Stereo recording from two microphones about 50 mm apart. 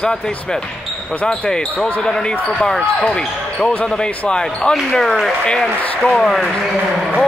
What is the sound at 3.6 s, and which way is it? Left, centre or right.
Speech, left.